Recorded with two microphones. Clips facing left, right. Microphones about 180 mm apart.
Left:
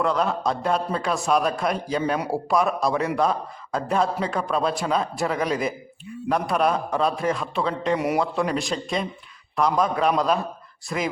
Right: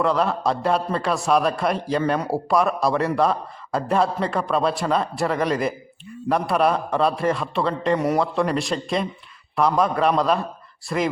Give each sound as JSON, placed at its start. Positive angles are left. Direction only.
{"t": 0.0, "sound": "a man's voice", "side_deg": 0}